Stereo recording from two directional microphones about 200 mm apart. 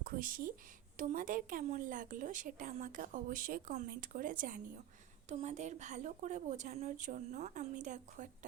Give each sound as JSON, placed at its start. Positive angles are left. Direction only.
{"t": 0.0, "sound": "a woman's voice", "side_deg": -45}